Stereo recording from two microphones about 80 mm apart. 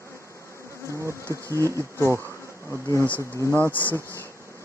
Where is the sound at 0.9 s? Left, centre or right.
Right.